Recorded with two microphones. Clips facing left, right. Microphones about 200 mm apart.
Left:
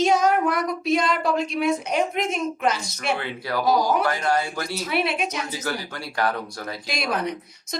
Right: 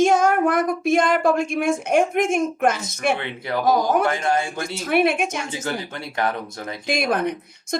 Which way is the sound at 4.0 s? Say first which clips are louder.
Right 2 dB; 25° right (ahead or behind).